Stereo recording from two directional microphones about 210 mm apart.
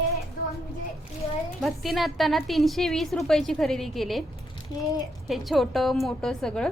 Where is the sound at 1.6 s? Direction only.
Centre (ahead or behind).